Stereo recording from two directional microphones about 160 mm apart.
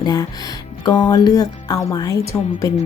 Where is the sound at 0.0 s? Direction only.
25° left (ahead or behind).